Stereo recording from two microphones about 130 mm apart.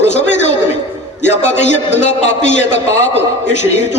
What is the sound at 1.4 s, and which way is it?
A man's voice, 65° left (ahead or behind).